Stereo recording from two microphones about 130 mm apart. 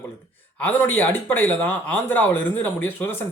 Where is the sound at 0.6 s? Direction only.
15° left (ahead or behind).